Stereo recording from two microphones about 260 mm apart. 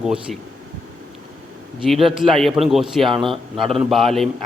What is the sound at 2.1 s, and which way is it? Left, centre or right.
A man's voice, centre.